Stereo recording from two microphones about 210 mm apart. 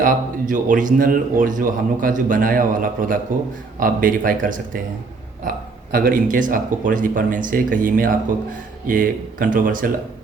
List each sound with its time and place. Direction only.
0.0 s a man's voice: 40° right (ahead or behind)
5.9 s a man's voice: 45° right (ahead or behind)